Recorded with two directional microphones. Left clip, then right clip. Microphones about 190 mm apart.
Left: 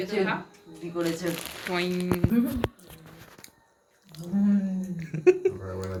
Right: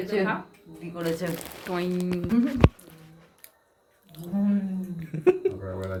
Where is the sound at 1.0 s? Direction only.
20° right (ahead or behind).